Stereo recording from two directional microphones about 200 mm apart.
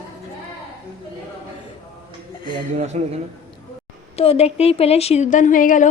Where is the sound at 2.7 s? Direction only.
35° right (ahead or behind).